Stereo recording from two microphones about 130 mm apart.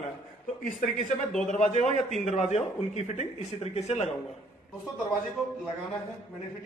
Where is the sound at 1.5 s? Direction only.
70° left (ahead or behind).